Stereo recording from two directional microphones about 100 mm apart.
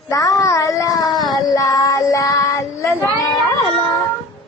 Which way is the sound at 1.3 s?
35° left (ahead or behind).